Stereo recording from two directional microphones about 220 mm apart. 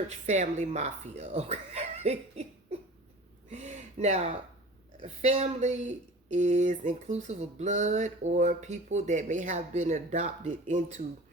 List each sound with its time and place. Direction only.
0.1 s speech: 30° right (ahead or behind)
3.5 s a sound: 30° right (ahead or behind)
4.9 s speech: 30° right (ahead or behind)